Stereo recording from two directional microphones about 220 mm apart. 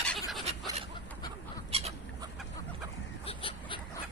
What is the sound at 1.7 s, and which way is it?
Fowl, 25° right (ahead or behind).